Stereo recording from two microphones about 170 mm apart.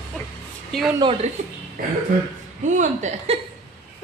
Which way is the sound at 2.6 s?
45° right (ahead or behind).